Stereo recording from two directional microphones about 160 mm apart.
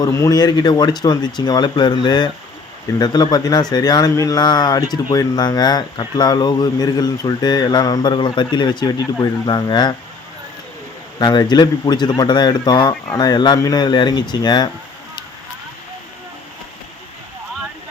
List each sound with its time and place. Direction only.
0.0 s speech: 20° left (ahead or behind)
11.2 s speech: 25° left (ahead or behind)